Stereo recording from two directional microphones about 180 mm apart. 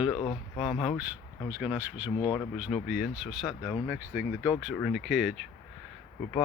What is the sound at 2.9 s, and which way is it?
Speech, centre (ahead or behind).